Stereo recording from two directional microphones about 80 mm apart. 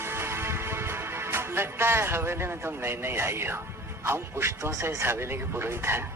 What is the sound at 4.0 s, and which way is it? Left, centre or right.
Speech, right.